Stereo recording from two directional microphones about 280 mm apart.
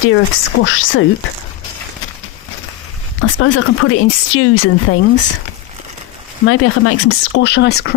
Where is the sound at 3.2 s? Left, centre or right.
Left.